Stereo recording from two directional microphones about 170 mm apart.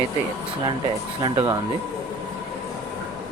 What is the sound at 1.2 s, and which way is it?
Speech, 25° right (ahead or behind).